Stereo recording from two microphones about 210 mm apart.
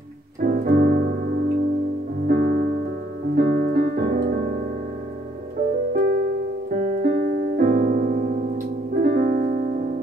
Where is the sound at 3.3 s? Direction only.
45° right (ahead or behind).